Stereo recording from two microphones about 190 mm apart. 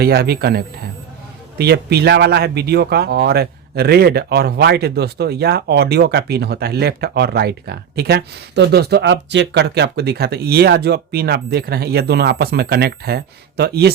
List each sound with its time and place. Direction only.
0.0 s speech: 55° right (ahead or behind)